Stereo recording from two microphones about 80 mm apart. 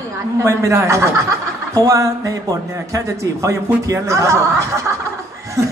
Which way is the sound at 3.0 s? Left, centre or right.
Right.